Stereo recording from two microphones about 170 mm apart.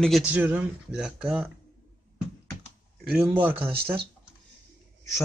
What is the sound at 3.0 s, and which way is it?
Speech, 5° right (ahead or behind).